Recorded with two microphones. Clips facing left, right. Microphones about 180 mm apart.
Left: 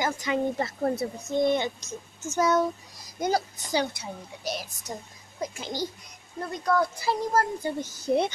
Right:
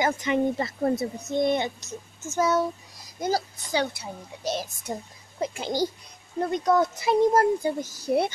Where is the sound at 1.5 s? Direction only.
60° right (ahead or behind).